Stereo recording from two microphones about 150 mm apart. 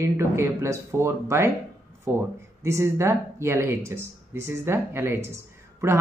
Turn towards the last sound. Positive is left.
turn(degrees=-20)  # may be behind; listen again after turning